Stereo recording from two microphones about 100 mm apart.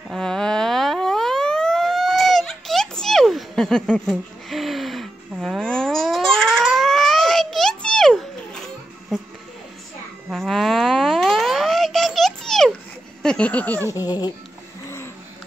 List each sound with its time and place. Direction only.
0.1 s siren: 5° left (ahead or behind)
10.3 s boing: 5° left (ahead or behind)
13.2 s speech: 10° left (ahead or behind)
13.8 s speech: 35° left (ahead or behind)